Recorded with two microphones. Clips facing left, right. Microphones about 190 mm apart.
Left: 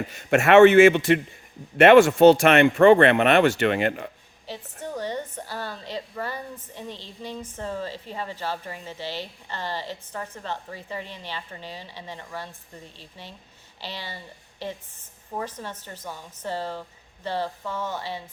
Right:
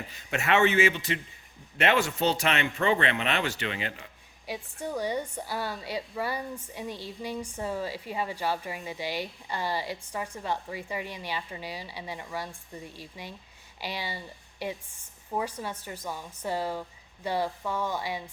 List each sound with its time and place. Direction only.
0.2 s a man's voice: 60° left (ahead or behind)
4.4 s a woman's voice: 10° right (ahead or behind)